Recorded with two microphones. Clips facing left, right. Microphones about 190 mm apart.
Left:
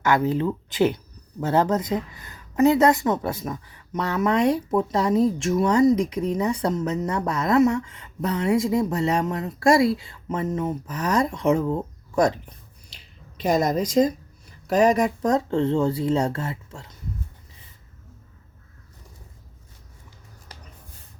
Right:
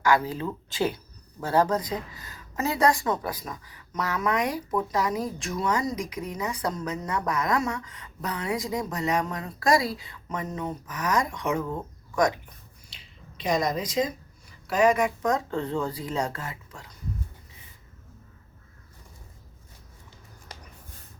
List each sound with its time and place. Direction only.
0.0 s speech: 20° left (ahead or behind)
13.3 s a woman's voice: 45° left (ahead or behind); by 16.8 s 30° left (ahead or behind)